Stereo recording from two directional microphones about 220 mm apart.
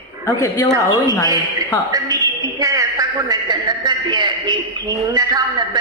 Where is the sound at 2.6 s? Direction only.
15° right (ahead or behind).